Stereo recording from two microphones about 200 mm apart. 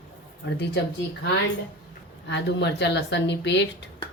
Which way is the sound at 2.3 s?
60° left (ahead or behind).